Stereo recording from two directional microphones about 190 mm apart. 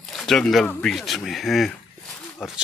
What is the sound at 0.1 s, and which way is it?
Speech, centre (ahead or behind).